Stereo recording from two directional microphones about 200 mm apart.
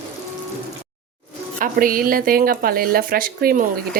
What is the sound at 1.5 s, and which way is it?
A woman's voice, 45° right (ahead or behind).